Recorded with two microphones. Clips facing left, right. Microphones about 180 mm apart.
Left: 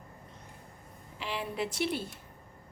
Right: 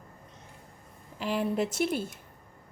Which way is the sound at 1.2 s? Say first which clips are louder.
Right 6 dB; 45° right (ahead or behind).